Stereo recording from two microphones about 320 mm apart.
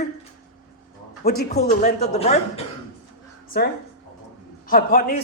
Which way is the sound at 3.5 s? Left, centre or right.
Left.